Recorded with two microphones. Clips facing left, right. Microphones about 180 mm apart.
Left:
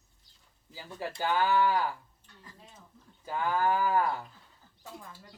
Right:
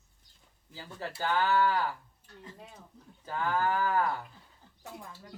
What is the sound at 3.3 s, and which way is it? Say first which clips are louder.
Speech: left 1 dB; 15° left (ahead or behind).